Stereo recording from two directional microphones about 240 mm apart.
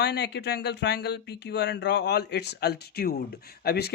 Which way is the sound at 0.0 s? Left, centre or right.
Left.